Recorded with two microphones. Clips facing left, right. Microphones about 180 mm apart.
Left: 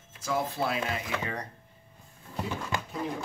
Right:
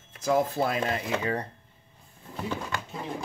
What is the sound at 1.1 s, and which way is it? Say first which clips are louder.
Speech: right 5 dB; 30° right (ahead or behind).